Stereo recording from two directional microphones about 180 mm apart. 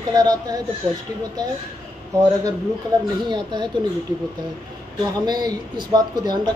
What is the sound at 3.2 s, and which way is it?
Speech, 25° right (ahead or behind).